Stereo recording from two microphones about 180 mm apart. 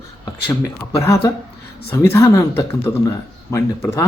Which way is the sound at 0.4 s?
15° left (ahead or behind).